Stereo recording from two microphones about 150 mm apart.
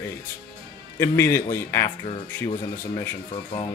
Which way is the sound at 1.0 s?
15° left (ahead or behind).